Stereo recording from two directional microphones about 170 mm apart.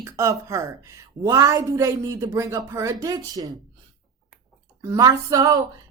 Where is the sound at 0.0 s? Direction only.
15° right (ahead or behind).